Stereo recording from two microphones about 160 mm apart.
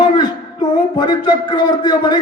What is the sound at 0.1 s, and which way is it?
A man's voice, 25° left (ahead or behind).